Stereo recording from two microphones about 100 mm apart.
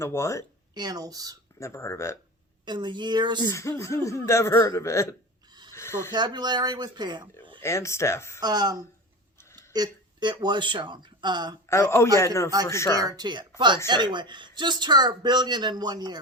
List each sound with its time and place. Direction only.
0.0 s speech: 30° left (ahead or behind)
0.7 s speech: 40° right (ahead or behind)
1.5 s speech: 30° left (ahead or behind)
2.6 s speech: 50° right (ahead or behind)
3.5 s speech: 30° left (ahead or behind)
5.7 s a sound: 25° left (ahead or behind)
6.1 s speech: 45° right (ahead or behind)
7.6 s speech: 30° left (ahead or behind)
8.4 s speech: 40° right (ahead or behind)
11.7 s speech: 25° left (ahead or behind)
13.0 s speech: 40° right (ahead or behind)